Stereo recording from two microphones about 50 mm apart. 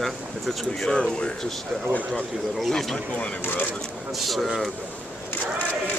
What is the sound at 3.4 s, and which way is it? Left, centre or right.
Speech, left.